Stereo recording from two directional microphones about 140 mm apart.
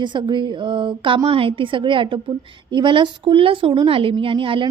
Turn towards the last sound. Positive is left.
turn(degrees=-40)  # may be behind; listen again after turning